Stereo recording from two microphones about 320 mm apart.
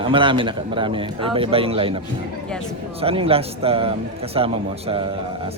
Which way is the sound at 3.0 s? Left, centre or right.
Centre.